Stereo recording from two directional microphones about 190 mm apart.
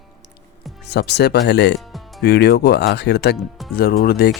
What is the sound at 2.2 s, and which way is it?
Speech, 60° left (ahead or behind).